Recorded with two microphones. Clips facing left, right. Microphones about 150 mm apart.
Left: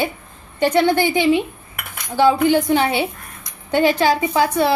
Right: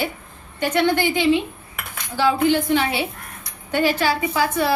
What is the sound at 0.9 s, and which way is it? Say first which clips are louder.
Speech: left 2 dB; 15° left (ahead or behind).